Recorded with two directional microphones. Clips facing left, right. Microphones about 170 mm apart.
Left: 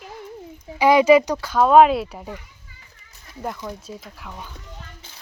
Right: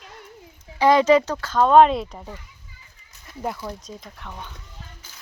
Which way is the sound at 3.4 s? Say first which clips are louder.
Even; centre (ahead or behind).